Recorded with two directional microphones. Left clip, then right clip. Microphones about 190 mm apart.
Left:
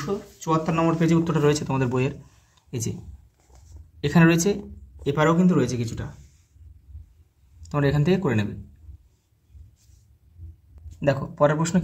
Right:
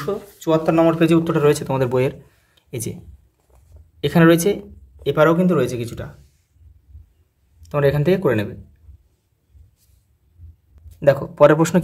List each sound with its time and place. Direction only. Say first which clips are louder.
0.0 s speech: right 5 dB; 30° right (ahead or behind); by 2.9 s 15° right (ahead or behind)
4.0 s speech: right 6 dB; 15° right (ahead or behind)
7.6 s speech: right 6 dB; 15° right (ahead or behind)
11.0 s speech: right 8 dB; 30° right (ahead or behind)